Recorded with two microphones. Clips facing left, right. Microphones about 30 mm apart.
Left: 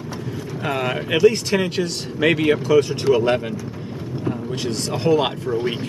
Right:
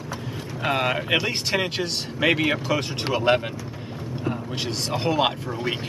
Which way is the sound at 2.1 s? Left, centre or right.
Centre.